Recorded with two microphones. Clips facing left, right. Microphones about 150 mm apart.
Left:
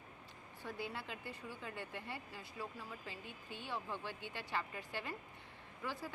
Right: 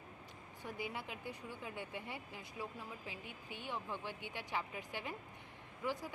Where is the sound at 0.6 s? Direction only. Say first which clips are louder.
Right 1 dB; 15° right (ahead or behind).